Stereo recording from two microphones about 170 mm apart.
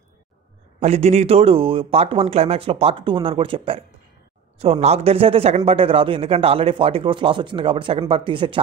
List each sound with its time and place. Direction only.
0.7 s speech: 40° right (ahead or behind)